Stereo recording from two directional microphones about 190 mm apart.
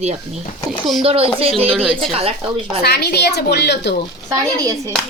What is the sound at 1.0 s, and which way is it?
Speech, 30° right (ahead or behind).